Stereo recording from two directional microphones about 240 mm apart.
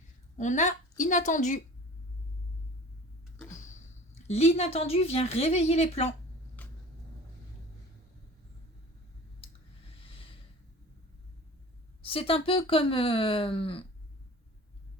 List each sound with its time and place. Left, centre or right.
0.3 s a woman's voice: left
4.1 s a woman's voice: left
12.0 s a woman's voice: left